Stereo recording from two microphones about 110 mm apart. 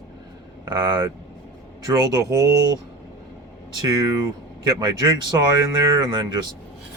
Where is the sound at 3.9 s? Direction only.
35° right (ahead or behind).